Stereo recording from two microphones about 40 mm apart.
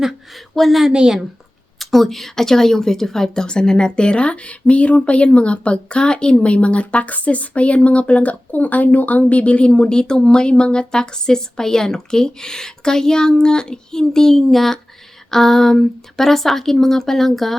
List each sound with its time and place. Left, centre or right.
0.3 s speech: centre
0.9 s a woman's voice: centre
1.8 s a woman's voice: centre